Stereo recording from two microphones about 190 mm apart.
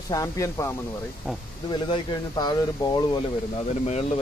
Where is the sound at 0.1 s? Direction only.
15° left (ahead or behind).